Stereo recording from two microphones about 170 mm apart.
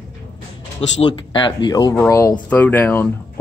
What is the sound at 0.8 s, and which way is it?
Speech, 30° left (ahead or behind).